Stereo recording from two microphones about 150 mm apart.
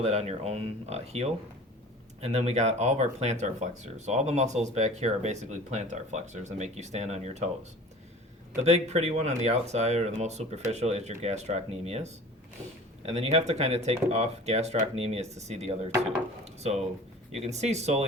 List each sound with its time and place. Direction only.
0.0 s speech: 45° right (ahead or behind)
8.6 s speech: 45° right (ahead or behind)